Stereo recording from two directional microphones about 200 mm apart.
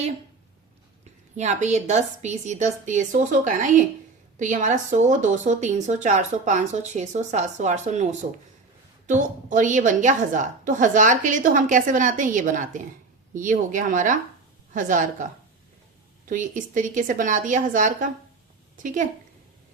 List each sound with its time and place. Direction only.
1.4 s speech: 35° right (ahead or behind)